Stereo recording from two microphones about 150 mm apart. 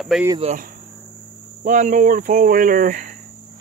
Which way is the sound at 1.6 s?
55° right (ahead or behind).